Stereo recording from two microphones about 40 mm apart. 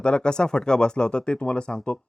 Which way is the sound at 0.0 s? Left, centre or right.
Left.